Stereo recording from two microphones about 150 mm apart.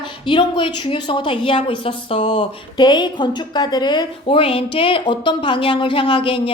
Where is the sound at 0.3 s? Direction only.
35° left (ahead or behind).